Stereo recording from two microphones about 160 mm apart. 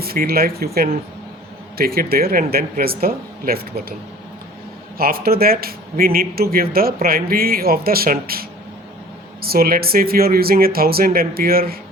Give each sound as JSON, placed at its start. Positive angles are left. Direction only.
{"t": 0.0, "sound": "speech", "side_deg": -70}
{"t": 4.9, "sound": "speech", "side_deg": -70}